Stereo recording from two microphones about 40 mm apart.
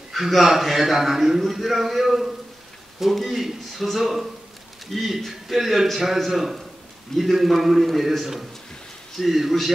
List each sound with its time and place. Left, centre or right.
0.1 s a man's voice: centre